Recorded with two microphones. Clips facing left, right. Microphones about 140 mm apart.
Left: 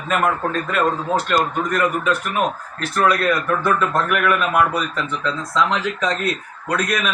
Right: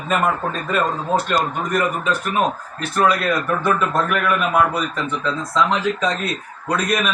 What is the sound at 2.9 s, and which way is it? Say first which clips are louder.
A man's voice: even; centre (ahead or behind).